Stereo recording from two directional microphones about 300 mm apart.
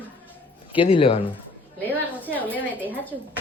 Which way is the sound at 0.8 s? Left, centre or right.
Centre.